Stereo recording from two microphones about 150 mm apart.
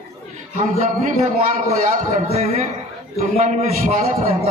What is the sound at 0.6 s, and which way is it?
A man's voice, 45° right (ahead or behind).